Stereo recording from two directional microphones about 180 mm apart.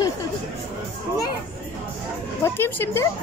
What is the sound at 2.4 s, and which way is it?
Speech, 15° left (ahead or behind).